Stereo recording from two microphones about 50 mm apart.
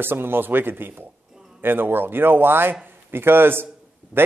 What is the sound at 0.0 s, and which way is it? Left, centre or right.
Speech, right.